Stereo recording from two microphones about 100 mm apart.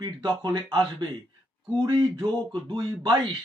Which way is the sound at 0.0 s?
50° right (ahead or behind).